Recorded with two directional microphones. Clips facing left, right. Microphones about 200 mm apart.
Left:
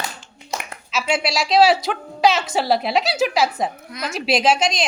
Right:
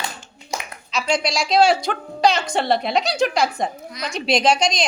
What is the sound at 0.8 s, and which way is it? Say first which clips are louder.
A woman's voice: even; 5° left (ahead or behind).